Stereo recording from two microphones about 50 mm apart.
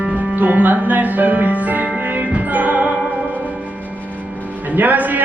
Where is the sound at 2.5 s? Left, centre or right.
Right.